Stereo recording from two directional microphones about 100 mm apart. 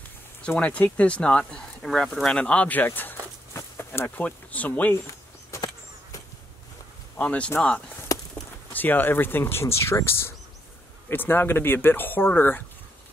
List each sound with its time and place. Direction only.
0.5 s speech: 15° left (ahead or behind)
5.5 s a sound: 30° left (ahead or behind)
7.2 s speech: 15° left (ahead or behind)
8.7 s speech: 20° left (ahead or behind)